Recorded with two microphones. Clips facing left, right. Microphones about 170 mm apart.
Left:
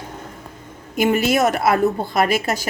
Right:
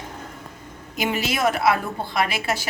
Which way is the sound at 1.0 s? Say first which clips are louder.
Left 6 dB; 50° left (ahead or behind).